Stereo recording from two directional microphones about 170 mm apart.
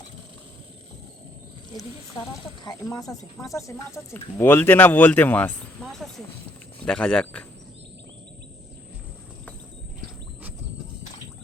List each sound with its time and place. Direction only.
2.8 s speech: 15° left (ahead or behind)